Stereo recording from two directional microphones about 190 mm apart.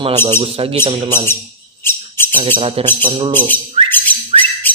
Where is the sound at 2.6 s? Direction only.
25° right (ahead or behind).